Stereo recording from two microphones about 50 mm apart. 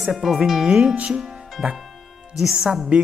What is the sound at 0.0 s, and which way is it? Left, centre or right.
A man's voice, centre.